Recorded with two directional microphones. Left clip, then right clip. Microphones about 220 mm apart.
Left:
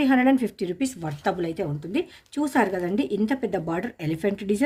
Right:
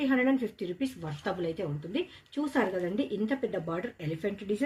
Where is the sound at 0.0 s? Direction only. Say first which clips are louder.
Left 7 dB; 50° left (ahead or behind).